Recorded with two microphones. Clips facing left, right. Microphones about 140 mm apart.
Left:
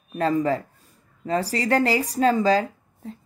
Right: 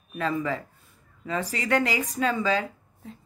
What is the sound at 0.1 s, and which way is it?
Speech, 40° left (ahead or behind).